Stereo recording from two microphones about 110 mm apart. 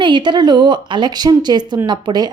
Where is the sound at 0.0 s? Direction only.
45° right (ahead or behind).